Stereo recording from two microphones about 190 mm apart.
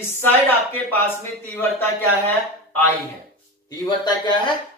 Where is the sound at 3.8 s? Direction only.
25° left (ahead or behind).